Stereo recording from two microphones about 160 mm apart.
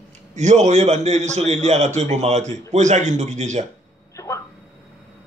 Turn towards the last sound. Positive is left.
turn(degrees=15)  # may be behind; listen again after turning